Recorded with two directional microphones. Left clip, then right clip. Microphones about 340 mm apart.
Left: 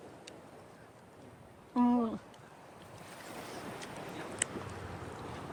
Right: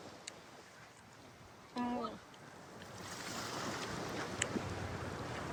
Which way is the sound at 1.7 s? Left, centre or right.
Centre.